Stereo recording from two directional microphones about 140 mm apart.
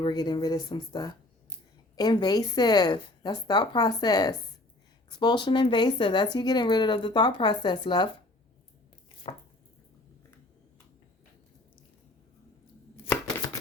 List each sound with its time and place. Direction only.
0.0 s a woman's voice: 30° left (ahead or behind)
9.2 s chopping: 45° left (ahead or behind)